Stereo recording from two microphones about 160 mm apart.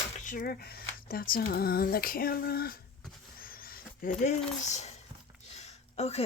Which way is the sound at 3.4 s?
65° left (ahead or behind).